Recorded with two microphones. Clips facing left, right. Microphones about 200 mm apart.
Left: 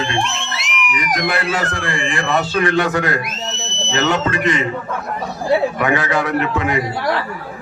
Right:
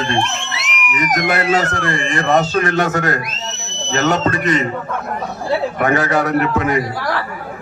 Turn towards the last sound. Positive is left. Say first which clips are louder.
# right 2 dB
turn(degrees=-40)  # may be behind; listen again after turning